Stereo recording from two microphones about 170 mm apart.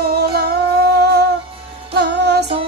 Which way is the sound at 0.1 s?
65° right (ahead or behind).